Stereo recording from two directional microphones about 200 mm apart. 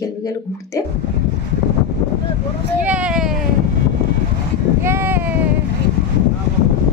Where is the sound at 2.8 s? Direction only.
5° right (ahead or behind).